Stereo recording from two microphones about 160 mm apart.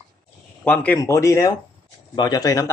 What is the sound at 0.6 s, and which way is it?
Speech, 10° left (ahead or behind).